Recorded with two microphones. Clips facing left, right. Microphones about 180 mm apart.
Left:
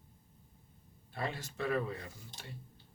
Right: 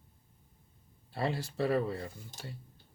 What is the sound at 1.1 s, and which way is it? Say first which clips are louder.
Speech: right 5 dB; 35° right (ahead or behind).